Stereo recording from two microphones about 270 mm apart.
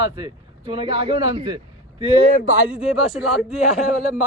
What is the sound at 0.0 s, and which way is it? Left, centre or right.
Speech, centre.